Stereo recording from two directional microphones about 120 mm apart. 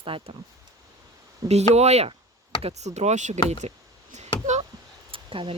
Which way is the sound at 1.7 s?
65° right (ahead or behind).